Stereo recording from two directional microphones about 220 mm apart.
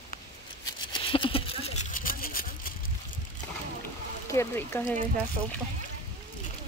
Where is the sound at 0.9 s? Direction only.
25° left (ahead or behind); by 2.7 s 40° left (ahead or behind).